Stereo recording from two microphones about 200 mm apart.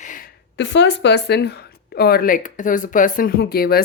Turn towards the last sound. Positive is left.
turn(degrees=50)  # may be behind; listen again after turning